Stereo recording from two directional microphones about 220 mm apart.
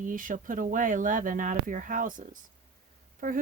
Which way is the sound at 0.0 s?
40° right (ahead or behind).